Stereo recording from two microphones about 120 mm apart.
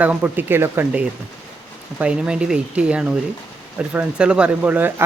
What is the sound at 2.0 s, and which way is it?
Speech, 10° right (ahead or behind).